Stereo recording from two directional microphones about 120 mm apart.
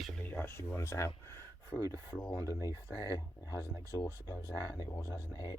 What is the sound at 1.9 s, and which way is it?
Speech, 20° left (ahead or behind).